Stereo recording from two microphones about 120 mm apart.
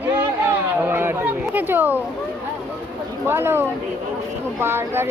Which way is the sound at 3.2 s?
20° right (ahead or behind).